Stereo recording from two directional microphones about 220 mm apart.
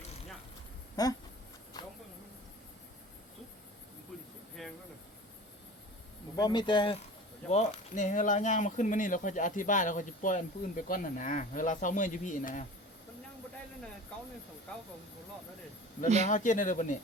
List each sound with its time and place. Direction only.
1.0 s speech: 15° left (ahead or behind)
4.6 s a sound: centre (ahead or behind)
6.3 s speech: 20° left (ahead or behind)
7.5 s speech: 30° left (ahead or behind)
16.0 s speech: 30° right (ahead or behind)
16.3 s speech: 35° left (ahead or behind)